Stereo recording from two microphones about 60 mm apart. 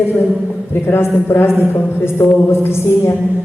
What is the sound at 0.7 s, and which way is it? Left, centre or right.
Speech, left.